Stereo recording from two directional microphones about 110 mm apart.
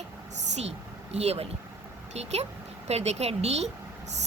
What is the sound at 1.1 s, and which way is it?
A woman's voice, 75° right (ahead or behind).